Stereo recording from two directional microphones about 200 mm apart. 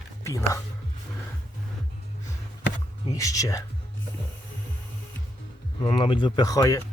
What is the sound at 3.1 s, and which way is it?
Speech, 15° left (ahead or behind).